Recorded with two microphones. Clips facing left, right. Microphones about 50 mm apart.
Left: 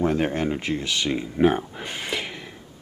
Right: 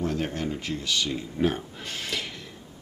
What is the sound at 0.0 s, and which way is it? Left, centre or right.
Speech, left.